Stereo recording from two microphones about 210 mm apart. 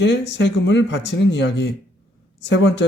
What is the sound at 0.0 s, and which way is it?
Speech, 55° left (ahead or behind).